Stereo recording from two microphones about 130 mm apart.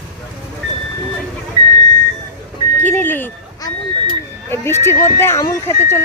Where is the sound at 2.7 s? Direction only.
15° left (ahead or behind).